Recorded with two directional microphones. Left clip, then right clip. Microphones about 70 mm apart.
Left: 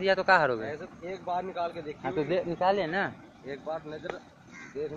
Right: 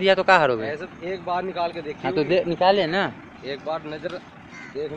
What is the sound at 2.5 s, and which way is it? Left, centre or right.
Speech, right.